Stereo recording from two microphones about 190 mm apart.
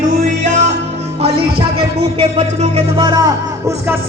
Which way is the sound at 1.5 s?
55° right (ahead or behind).